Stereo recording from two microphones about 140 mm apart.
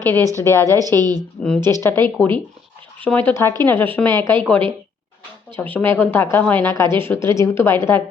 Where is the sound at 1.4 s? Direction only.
5° left (ahead or behind).